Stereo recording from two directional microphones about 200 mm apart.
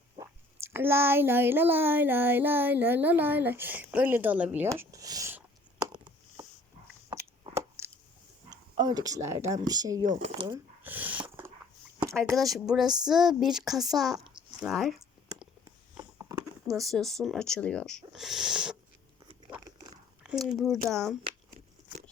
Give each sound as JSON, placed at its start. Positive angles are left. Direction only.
{"t": 0.2, "sound": "a child's voice", "side_deg": -10}
{"t": 8.4, "sound": "speech", "side_deg": -20}
{"t": 10.1, "sound": "speech", "side_deg": -35}
{"t": 10.8, "sound": "dog", "side_deg": -10}
{"t": 12.1, "sound": "speech", "side_deg": 0}
{"t": 14.3, "sound": "a sound", "side_deg": 0}
{"t": 16.8, "sound": "speech", "side_deg": 0}
{"t": 20.2, "sound": "speech", "side_deg": 0}